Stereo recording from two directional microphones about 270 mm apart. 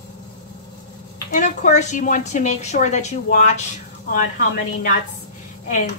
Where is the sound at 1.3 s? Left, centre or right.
Left.